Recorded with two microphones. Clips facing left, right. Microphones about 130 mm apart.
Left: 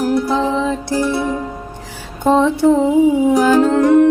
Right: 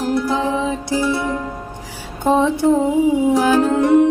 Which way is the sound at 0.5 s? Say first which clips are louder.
Left 2 dB; 15° right (ahead or behind).